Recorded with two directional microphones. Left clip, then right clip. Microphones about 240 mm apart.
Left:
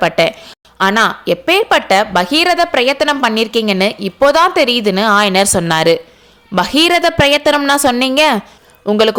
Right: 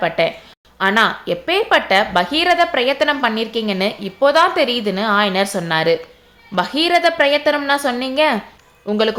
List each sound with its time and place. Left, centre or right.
0.0 s a woman's voice: left